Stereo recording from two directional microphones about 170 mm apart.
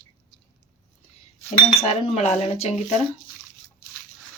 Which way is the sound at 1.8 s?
40° left (ahead or behind).